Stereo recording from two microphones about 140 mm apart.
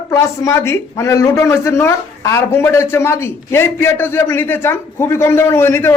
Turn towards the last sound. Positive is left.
turn(degrees=15)  # may be behind; listen again after turning